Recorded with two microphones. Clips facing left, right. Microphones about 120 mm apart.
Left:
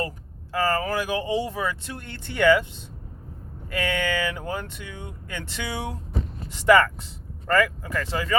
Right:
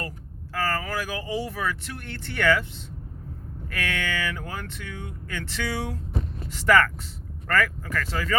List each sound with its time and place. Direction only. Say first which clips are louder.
0.5 s speech: left 4 dB; 20° left (ahead or behind)